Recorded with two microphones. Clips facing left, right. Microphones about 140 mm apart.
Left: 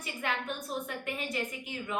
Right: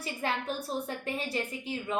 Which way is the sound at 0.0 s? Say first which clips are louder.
Right 2 dB; 35° right (ahead or behind).